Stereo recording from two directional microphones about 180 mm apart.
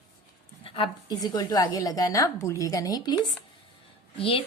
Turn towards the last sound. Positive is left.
turn(degrees=30)  # may be behind; listen again after turning